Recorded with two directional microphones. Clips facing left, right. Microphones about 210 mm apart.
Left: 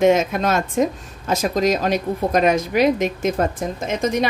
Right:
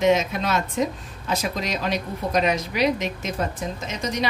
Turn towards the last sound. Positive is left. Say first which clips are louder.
# left 7 dB
turn(degrees=50)  # may be behind; listen again after turning